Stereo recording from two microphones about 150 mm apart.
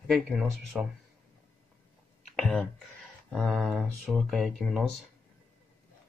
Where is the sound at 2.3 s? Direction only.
5° left (ahead or behind).